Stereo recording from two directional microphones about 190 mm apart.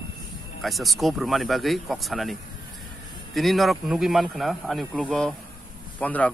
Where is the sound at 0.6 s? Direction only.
Centre (ahead or behind).